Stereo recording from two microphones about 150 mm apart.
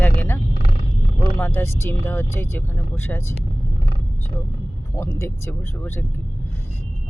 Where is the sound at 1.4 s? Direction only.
15° left (ahead or behind).